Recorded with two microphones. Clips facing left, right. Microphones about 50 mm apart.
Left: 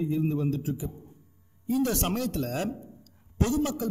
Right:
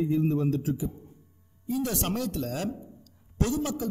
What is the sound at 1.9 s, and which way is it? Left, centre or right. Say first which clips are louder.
Speech: left 1 dB; left.